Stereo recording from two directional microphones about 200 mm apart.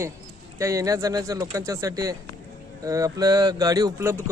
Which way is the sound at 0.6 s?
15° right (ahead or behind).